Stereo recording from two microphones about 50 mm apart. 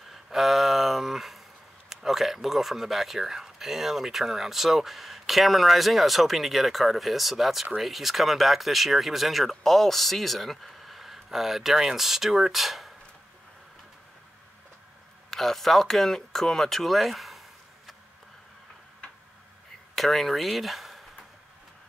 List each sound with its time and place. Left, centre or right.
0.1 s a sound: centre
1.9 s speech: centre
15.2 s speech: centre
20.0 s speech: centre